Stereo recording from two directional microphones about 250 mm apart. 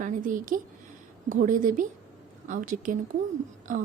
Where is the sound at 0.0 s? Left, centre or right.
Right.